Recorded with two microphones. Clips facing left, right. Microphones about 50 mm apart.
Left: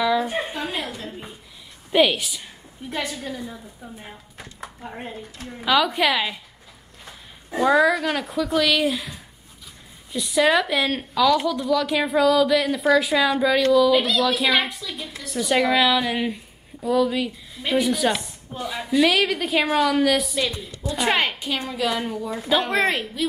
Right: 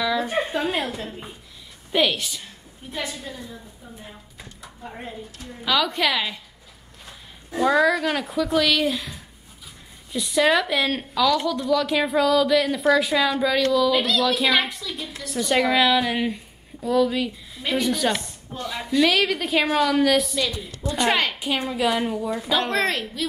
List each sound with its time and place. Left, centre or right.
0.0 s a sound: centre
0.6 s a woman's voice: right
1.9 s speech: centre
2.9 s a woman's voice: left
4.6 s a woman's voice: left
5.7 s speech: centre
7.5 s speech: centre
20.3 s speech: centre
21.4 s a woman's voice: centre